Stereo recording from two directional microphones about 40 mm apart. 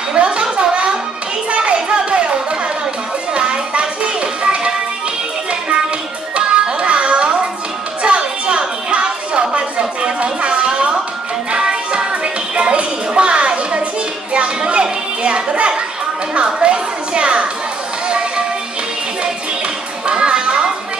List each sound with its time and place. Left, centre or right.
0.1 s a sound: right
1.5 s children playing: right
3.3 s music: right
6.3 s music: right
8.0 s a sound: right
11.5 s music: right
14.3 s children playing: right
16.3 s music: right
20.1 s music: right